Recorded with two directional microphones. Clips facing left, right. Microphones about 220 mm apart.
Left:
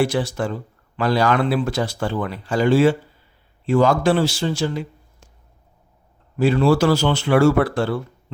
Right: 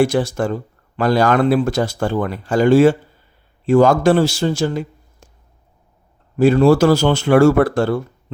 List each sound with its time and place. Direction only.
0.0 s speech: 45° right (ahead or behind)
6.3 s speech: 45° right (ahead or behind)